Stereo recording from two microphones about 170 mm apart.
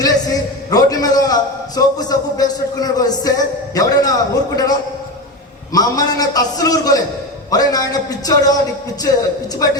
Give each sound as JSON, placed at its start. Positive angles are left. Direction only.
{"t": 0.0, "sound": "a man's voice", "side_deg": 20}